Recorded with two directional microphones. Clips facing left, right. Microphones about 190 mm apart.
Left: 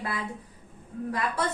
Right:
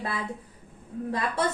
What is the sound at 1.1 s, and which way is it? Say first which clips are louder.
Speech: right 1 dB; 25° right (ahead or behind).